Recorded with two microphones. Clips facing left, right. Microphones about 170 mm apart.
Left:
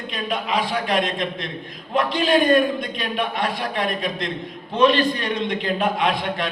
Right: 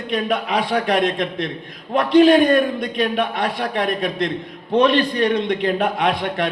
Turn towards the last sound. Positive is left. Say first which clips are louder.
# right 2 dB
turn(degrees=-60)  # may be behind; listen again after turning